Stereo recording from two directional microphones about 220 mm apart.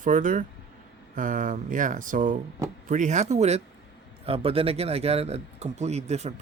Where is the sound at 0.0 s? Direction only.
35° right (ahead or behind).